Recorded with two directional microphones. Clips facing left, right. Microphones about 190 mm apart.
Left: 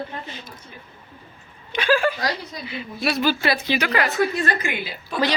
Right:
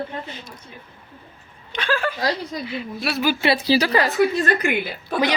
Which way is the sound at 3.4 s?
30° right (ahead or behind).